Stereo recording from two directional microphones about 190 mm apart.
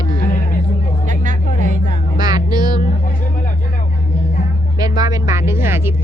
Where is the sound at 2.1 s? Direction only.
20° right (ahead or behind).